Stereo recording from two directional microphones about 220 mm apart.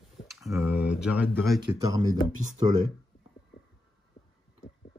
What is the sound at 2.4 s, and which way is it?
Speech, 35° right (ahead or behind).